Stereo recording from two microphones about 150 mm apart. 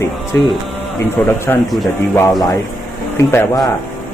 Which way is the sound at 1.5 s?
15° left (ahead or behind).